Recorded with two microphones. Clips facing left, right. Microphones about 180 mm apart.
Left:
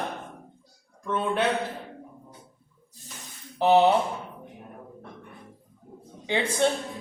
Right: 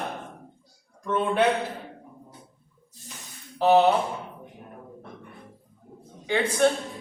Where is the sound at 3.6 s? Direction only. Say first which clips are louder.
Right 1 dB; 20° left (ahead or behind).